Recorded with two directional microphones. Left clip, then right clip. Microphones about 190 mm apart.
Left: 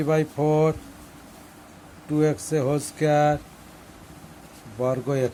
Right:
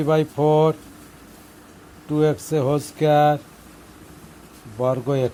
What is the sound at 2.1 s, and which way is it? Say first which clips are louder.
Speech: right 3 dB; 10° right (ahead or behind).